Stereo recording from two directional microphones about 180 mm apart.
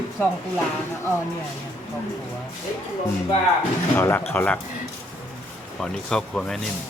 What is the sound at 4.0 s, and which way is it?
Speech, 10° left (ahead or behind).